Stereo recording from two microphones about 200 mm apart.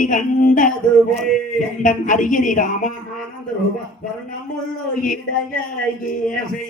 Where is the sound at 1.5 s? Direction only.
40° left (ahead or behind).